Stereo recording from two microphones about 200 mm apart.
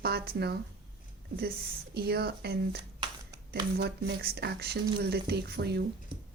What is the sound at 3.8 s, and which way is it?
Speech, 55° right (ahead or behind).